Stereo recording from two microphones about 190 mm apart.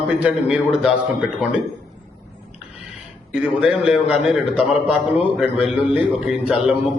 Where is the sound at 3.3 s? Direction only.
5° right (ahead or behind).